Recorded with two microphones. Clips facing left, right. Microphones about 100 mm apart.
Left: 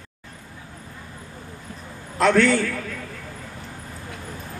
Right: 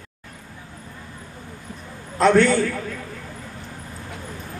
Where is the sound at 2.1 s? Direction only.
35° right (ahead or behind).